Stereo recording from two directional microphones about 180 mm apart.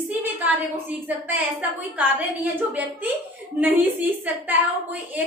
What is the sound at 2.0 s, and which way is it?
A woman's voice, 10° right (ahead or behind).